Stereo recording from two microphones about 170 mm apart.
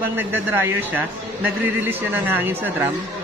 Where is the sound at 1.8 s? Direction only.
10° right (ahead or behind).